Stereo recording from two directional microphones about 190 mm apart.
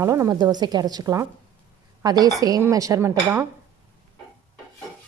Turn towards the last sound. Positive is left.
turn(degrees=-15)  # may be behind; listen again after turning